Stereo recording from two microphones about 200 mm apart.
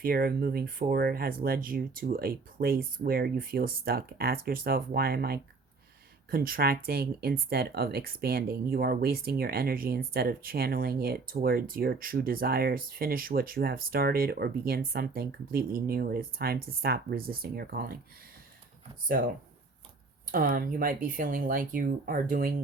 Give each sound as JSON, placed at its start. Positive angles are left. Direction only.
{"t": 0.0, "sound": "speech", "side_deg": -45}
{"t": 20.3, "sound": "speech", "side_deg": -45}